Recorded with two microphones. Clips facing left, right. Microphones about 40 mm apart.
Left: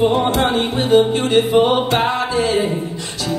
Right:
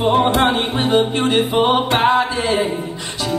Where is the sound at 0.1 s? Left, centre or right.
Centre.